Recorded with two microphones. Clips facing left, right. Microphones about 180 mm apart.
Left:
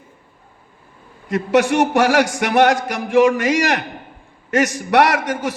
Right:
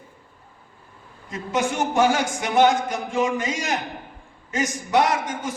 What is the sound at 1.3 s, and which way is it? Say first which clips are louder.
A man's voice: left 9 dB; 70° left (ahead or behind).